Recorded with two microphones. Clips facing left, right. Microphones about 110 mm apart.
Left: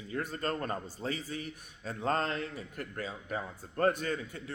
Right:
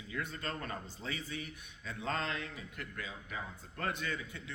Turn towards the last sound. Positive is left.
turn(degrees=40)  # may be behind; listen again after turning